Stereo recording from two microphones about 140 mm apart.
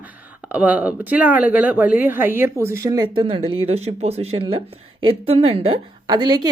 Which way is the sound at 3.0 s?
40° right (ahead or behind).